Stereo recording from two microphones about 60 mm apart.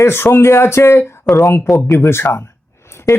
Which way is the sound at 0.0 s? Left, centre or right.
Left.